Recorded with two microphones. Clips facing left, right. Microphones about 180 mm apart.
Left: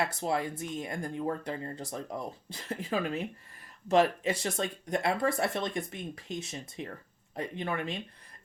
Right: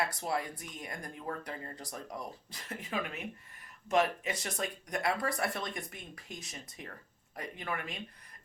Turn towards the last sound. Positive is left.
turn(degrees=25)  # may be behind; listen again after turning